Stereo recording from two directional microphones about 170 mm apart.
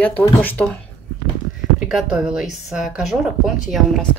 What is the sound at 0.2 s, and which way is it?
Speech, 10° left (ahead or behind).